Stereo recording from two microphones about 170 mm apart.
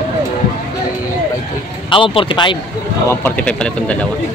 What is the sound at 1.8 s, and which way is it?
Speech, 30° left (ahead or behind).